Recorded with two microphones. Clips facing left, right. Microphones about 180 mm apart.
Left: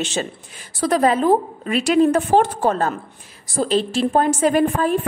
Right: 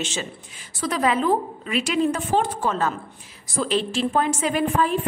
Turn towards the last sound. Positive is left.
turn(degrees=45)  # may be behind; listen again after turning